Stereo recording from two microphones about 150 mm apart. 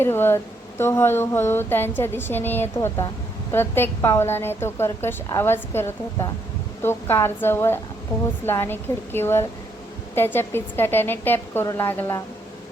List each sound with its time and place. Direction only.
0.0 s a woman's voice: 15° left (ahead or behind)